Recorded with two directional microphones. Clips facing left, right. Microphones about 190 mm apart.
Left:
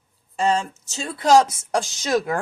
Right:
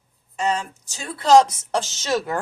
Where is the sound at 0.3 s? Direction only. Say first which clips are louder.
Left 3 dB; 30° left (ahead or behind).